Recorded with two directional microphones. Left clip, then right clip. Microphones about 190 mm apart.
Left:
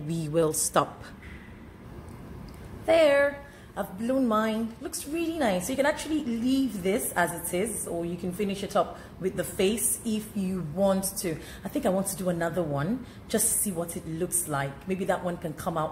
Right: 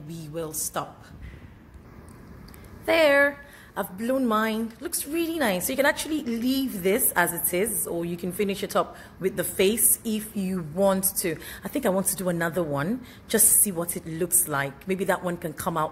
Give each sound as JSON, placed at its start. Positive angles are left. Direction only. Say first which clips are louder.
{"t": 0.1, "sound": "speech", "louder": "left 8 dB", "side_deg": 35}
{"t": 2.8, "sound": "speech", "louder": "right 1 dB", "side_deg": -55}